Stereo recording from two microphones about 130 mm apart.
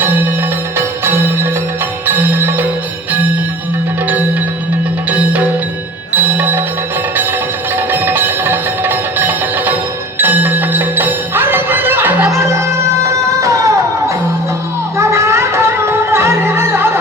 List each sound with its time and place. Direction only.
2.0 s music: 15° right (ahead or behind)
5.1 s music: 10° right (ahead or behind)
7.8 s music: 15° right (ahead or behind)
14.9 s music: 20° right (ahead or behind)